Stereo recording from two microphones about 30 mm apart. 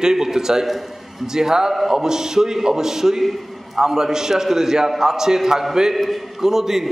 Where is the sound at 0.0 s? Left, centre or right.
Centre.